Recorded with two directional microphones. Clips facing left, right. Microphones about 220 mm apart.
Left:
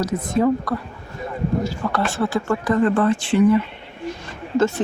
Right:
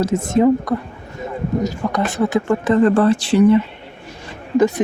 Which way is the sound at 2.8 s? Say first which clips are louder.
Right 4 dB; 40° right (ahead or behind).